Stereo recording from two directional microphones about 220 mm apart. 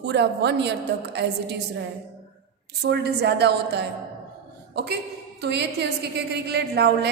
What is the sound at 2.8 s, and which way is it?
A woman's voice, 50° right (ahead or behind).